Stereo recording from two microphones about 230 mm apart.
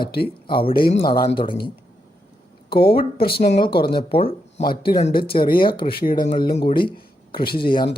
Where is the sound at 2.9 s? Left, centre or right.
Left.